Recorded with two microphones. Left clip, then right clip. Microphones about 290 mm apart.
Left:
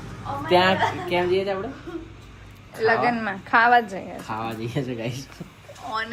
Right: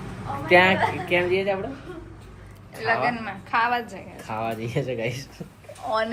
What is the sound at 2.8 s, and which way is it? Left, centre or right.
A woman's voice, left.